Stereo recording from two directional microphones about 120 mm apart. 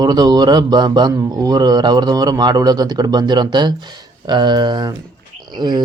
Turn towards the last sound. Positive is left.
turn(degrees=-35)  # may be behind; listen again after turning